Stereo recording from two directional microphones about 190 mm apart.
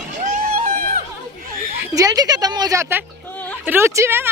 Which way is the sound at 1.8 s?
20° right (ahead or behind).